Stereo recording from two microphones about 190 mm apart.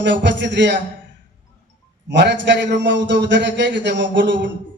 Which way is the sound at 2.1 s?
65° right (ahead or behind).